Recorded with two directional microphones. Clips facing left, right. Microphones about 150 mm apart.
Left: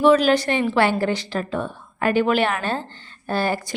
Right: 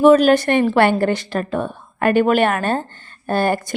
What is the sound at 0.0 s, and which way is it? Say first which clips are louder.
A woman's voice: right 4 dB; 50° right (ahead or behind).